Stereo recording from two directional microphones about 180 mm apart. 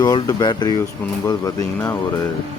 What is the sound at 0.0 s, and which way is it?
Speech, 20° left (ahead or behind).